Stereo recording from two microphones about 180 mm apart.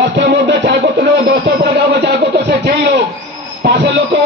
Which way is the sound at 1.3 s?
60° right (ahead or behind).